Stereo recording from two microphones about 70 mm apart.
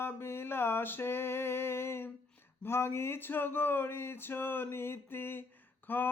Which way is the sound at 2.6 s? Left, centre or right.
Left.